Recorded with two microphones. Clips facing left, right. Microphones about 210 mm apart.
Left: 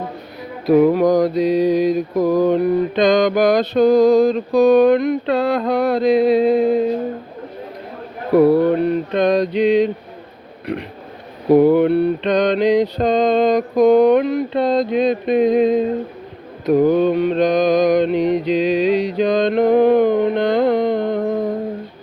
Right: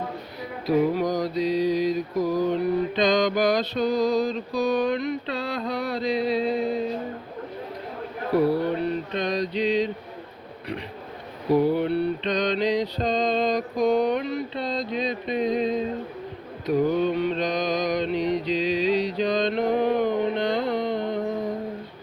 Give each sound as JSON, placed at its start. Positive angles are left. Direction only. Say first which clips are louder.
{"t": 0.7, "sound": "mantra", "louder": "left 9 dB", "side_deg": 55}
{"t": 8.3, "sound": "mantra", "louder": "left 9 dB", "side_deg": 55}
{"t": 11.4, "sound": "mantra", "louder": "left 9 dB", "side_deg": 55}